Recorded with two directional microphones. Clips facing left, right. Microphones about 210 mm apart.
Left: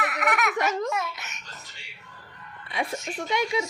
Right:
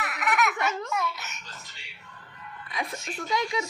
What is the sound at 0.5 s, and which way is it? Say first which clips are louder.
Babbling: left 4 dB; 40° left (ahead or behind).